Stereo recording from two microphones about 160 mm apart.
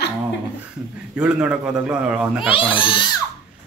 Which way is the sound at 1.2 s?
5° right (ahead or behind).